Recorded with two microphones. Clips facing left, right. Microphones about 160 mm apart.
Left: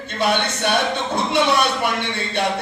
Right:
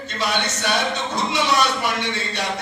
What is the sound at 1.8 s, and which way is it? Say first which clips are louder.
Speech: left 1 dB; 55° left (ahead or behind).